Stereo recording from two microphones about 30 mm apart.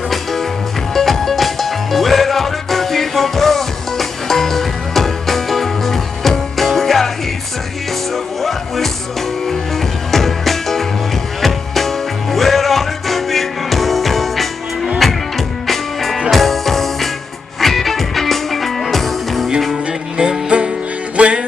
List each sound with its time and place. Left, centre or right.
0.9 s music: centre
8.4 s music: centre
20.2 s music: right